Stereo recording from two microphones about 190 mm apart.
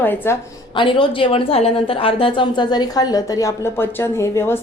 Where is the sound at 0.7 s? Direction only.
25° left (ahead or behind).